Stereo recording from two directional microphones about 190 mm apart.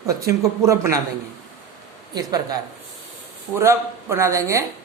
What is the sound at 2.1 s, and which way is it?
Speech, 20° right (ahead or behind).